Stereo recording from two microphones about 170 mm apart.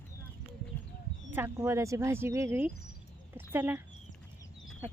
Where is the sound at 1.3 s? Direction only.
15° right (ahead or behind).